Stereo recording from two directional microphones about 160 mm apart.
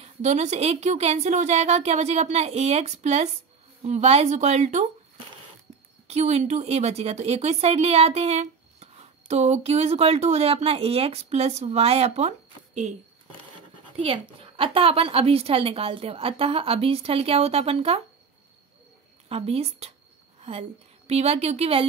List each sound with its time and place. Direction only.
0.0 s a woman's voice: 45° right (ahead or behind)
6.0 s a woman's voice: 40° right (ahead or behind)
13.9 s a woman's voice: 35° right (ahead or behind)
19.2 s a woman's voice: 40° right (ahead or behind)
21.1 s a woman's voice: 40° right (ahead or behind)